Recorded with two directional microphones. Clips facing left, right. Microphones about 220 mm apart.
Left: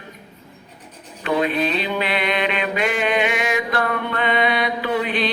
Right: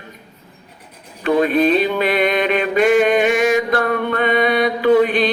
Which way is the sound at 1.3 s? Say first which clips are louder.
Right 6 dB; 45° right (ahead or behind).